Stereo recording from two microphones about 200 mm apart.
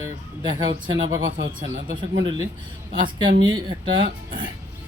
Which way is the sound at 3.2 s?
20° right (ahead or behind).